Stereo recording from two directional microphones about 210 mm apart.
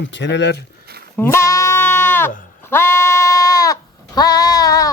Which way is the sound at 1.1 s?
10° left (ahead or behind).